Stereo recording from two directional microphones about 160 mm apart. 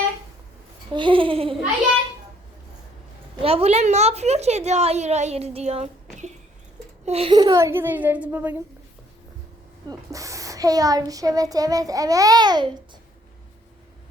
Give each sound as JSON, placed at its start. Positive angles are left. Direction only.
{"t": 0.9, "sound": "a sound", "side_deg": -30}
{"t": 3.4, "sound": "a woman's voice", "side_deg": -40}
{"t": 7.0, "sound": "speech", "side_deg": -40}
{"t": 7.3, "sound": "a woman's voice", "side_deg": -20}
{"t": 10.1, "sound": "a child's voice", "side_deg": -20}